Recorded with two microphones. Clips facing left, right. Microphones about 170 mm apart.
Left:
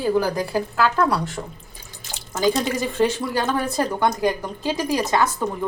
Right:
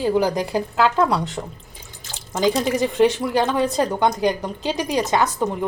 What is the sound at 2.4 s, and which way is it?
Speech, 20° right (ahead or behind).